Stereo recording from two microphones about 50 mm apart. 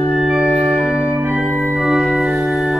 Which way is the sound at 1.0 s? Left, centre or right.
Right.